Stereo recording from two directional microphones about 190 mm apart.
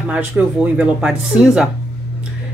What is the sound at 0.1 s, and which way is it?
Speech, 5° right (ahead or behind).